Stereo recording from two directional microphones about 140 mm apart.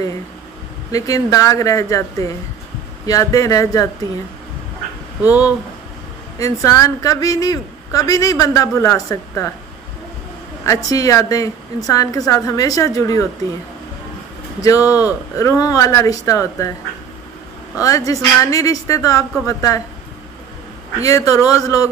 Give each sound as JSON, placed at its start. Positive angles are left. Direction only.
{"t": 0.9, "sound": "a man's voice", "side_deg": 25}
{"t": 3.1, "sound": "a man's voice", "side_deg": 25}
{"t": 5.2, "sound": "speech", "side_deg": -10}
{"t": 6.3, "sound": "a man's voice", "side_deg": 25}
{"t": 10.6, "sound": "a man's voice", "side_deg": 25}
{"t": 14.6, "sound": "a man's voice", "side_deg": 25}
{"t": 17.8, "sound": "a man's voice", "side_deg": 25}
{"t": 21.0, "sound": "a man's voice", "side_deg": 25}